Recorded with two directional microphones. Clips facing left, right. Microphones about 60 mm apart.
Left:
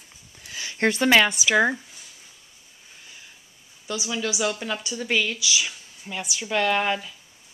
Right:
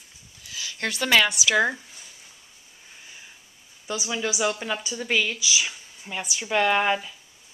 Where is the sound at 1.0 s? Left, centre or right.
Centre.